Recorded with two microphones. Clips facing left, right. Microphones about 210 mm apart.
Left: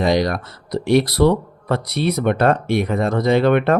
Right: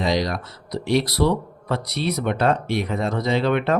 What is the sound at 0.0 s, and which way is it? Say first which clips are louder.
Speech: left 5 dB; 55° left (ahead or behind).